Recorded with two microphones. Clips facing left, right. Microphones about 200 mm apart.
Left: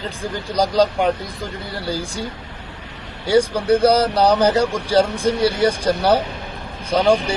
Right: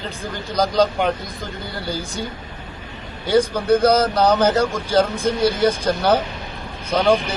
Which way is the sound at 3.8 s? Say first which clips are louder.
Left 2 dB; 30° left (ahead or behind).